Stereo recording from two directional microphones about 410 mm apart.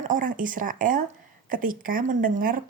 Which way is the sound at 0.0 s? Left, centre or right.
Centre.